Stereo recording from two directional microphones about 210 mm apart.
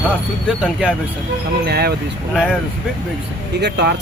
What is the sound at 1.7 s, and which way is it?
Speech, 50° right (ahead or behind).